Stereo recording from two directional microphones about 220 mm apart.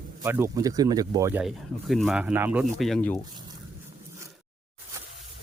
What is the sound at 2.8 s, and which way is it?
Speech, 5° left (ahead or behind).